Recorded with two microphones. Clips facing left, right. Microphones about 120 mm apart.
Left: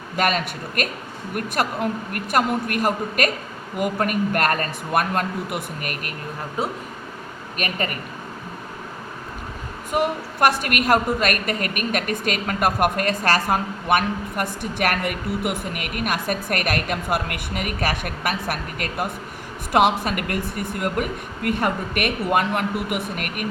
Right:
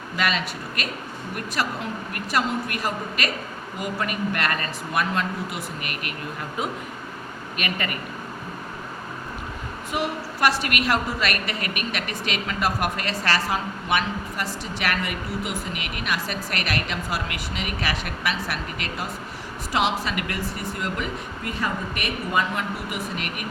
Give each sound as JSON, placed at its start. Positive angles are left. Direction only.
{"t": 0.2, "sound": "a woman's voice", "side_deg": 50}
{"t": 9.9, "sound": "a woman's voice", "side_deg": 50}